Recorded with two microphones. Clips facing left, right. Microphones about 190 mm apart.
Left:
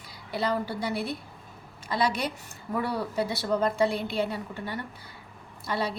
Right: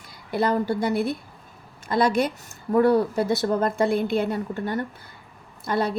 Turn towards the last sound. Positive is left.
turn(degrees=-50)  # may be behind; listen again after turning